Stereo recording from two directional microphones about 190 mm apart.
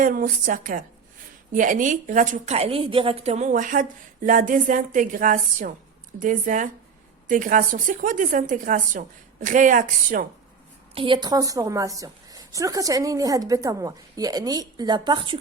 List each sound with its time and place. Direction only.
0.0 s a woman's voice: 45° right (ahead or behind)
10.9 s a woman's voice: 25° right (ahead or behind)